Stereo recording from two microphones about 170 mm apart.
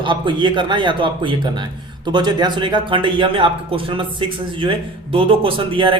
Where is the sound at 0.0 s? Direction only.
30° right (ahead or behind).